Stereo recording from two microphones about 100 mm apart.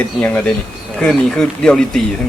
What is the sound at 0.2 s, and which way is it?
Speech, 10° left (ahead or behind).